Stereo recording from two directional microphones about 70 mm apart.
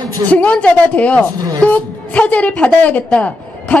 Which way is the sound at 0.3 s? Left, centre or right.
Left.